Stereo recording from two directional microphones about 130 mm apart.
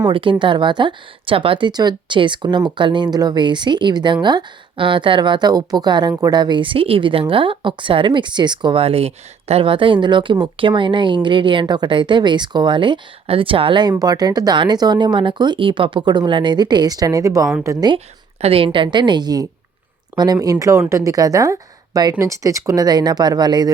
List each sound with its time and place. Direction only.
0.0 s speech: 40° right (ahead or behind); by 17.8 s 25° right (ahead or behind)
18.4 s a woman's voice: 45° right (ahead or behind)